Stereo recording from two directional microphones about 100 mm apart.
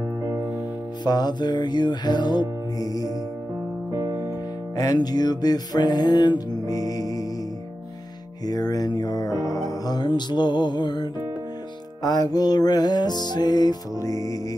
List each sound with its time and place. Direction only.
1.0 s music: 45° left (ahead or behind)
2.8 s music: 35° left (ahead or behind)
3.9 s music: 25° right (ahead or behind)
4.7 s music: 40° left (ahead or behind)
8.5 s music: 40° left (ahead or behind)